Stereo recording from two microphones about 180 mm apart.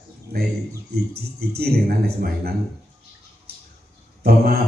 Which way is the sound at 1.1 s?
60° right (ahead or behind).